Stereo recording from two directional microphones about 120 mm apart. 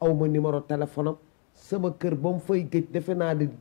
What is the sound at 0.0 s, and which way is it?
Speech, 20° left (ahead or behind).